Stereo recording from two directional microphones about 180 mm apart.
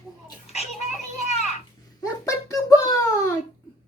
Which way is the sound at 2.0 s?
15° left (ahead or behind).